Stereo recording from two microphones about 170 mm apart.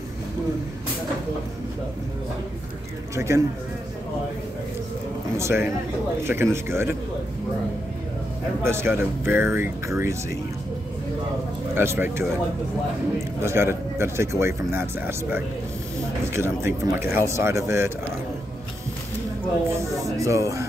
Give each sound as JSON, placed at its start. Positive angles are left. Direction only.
{"t": 3.2, "sound": "speech", "side_deg": -15}
{"t": 5.4, "sound": "speech", "side_deg": -15}
{"t": 8.6, "sound": "speech", "side_deg": -15}
{"t": 11.7, "sound": "speech", "side_deg": -15}
{"t": 13.4, "sound": "speech", "side_deg": -15}
{"t": 19.7, "sound": "speech", "side_deg": -20}